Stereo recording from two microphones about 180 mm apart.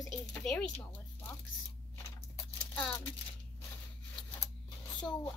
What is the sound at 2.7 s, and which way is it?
Speech, 10° left (ahead or behind).